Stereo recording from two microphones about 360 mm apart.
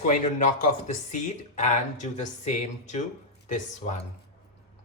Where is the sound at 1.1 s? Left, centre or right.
Centre.